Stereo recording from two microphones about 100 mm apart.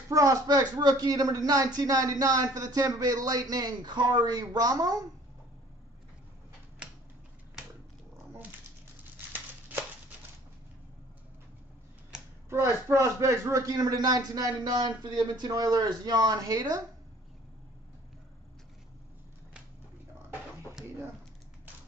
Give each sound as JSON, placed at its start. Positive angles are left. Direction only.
{"t": 0.1, "sound": "speech", "side_deg": -35}
{"t": 12.4, "sound": "speech", "side_deg": -25}